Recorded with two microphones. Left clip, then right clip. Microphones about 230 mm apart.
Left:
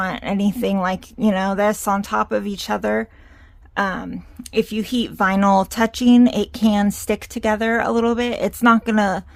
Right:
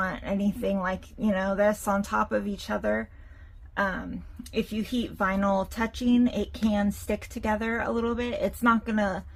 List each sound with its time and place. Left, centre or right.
0.0 s speech: left